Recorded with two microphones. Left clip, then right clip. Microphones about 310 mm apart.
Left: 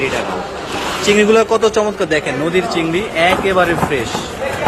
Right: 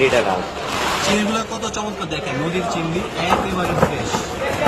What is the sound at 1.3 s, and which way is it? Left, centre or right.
Speech, centre.